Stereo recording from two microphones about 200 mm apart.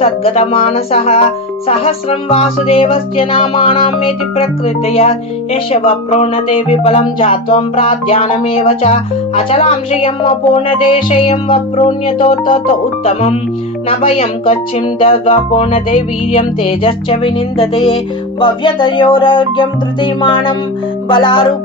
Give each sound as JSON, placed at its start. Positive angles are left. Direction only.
{"t": 0.0, "sound": "music", "side_deg": 30}